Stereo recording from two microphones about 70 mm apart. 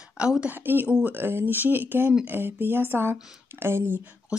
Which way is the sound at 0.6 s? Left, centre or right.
Right.